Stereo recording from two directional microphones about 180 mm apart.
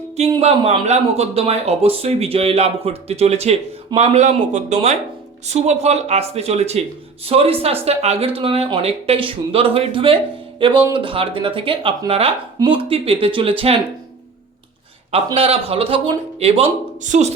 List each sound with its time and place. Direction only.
0.2 s speech: 35° right (ahead or behind)
15.4 s speech: 35° right (ahead or behind)